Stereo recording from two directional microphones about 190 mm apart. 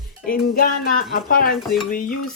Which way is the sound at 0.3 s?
50° left (ahead or behind).